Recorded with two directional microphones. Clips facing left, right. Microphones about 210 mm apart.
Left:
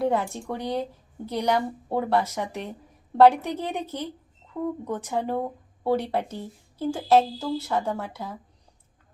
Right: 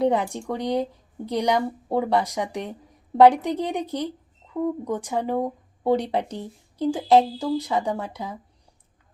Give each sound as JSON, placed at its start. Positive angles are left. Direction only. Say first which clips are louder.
{"t": 0.0, "sound": "a woman's voice", "louder": "right 3 dB", "side_deg": -15}